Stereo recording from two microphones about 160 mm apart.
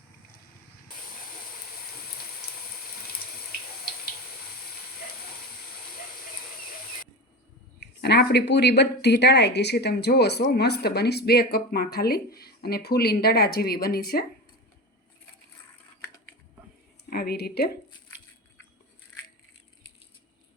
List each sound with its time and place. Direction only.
7.8 s speech: 90° left; by 14.3 s 75° left (ahead or behind)
17.1 s speech: 75° left (ahead or behind)